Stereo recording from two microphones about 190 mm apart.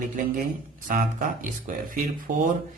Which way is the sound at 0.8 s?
45° right (ahead or behind).